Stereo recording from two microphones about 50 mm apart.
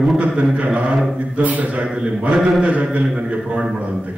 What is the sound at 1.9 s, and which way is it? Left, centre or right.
Speech, centre.